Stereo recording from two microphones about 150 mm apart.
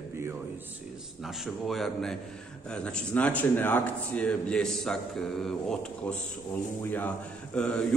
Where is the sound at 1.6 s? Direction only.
Centre (ahead or behind).